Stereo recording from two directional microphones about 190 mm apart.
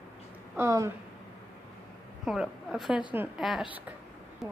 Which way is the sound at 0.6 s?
15° right (ahead or behind).